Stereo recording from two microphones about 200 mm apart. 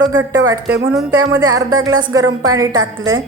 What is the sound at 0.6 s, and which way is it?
Speech, 60° right (ahead or behind).